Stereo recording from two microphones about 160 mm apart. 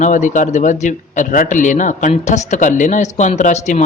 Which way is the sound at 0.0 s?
50° left (ahead or behind).